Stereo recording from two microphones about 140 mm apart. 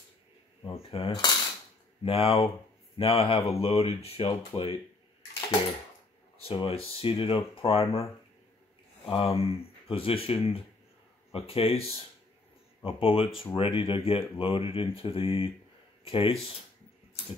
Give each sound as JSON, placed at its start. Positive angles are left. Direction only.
{"t": 0.7, "sound": "speech", "side_deg": 45}
{"t": 6.3, "sound": "speech", "side_deg": 40}
{"t": 9.1, "sound": "speech", "side_deg": 45}